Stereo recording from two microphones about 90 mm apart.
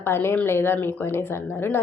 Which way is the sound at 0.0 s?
25° left (ahead or behind).